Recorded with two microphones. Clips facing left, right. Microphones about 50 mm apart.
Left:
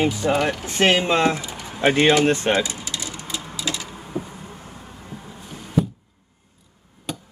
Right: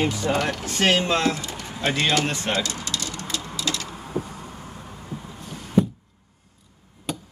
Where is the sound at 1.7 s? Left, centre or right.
Left.